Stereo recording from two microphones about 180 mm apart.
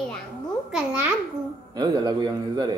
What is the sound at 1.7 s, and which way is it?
A man's voice, 25° right (ahead or behind).